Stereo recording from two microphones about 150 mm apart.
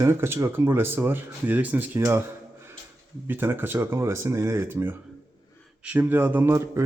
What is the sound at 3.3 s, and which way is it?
Speech, 15° right (ahead or behind).